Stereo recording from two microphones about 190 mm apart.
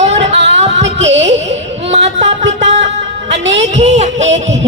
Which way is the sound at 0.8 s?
75° right (ahead or behind).